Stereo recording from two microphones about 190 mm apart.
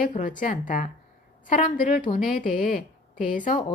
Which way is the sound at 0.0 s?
45° left (ahead or behind).